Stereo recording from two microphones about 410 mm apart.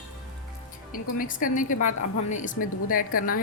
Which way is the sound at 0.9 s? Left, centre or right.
Centre.